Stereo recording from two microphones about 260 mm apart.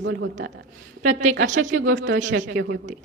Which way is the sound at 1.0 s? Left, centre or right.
Right.